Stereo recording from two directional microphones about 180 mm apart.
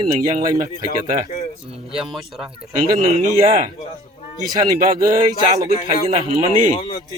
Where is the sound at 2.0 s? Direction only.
Centre (ahead or behind).